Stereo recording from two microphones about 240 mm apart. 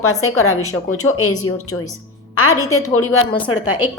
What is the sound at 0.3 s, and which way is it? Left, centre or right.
A woman's voice, left.